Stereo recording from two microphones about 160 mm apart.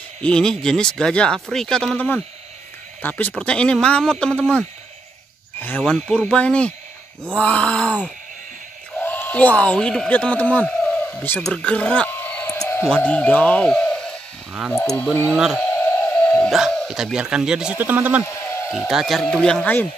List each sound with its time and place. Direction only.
0.2 s speech: 5° left (ahead or behind)
9.0 s speech: 10° left (ahead or behind)
11.4 s a sound: 5° left (ahead or behind)
12.9 s a man's voice: 10° left (ahead or behind)
14.8 s speech: 20° left (ahead or behind)
15.3 s speech: centre (ahead or behind)
15.8 s speech: 10° left (ahead or behind); by 18.2 s 10° right (ahead or behind)
18.2 s a sound: 20° left (ahead or behind)
18.7 s speech: 5° right (ahead or behind)